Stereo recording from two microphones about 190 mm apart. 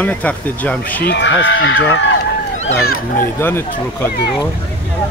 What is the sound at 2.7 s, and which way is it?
Speech, 10° left (ahead or behind).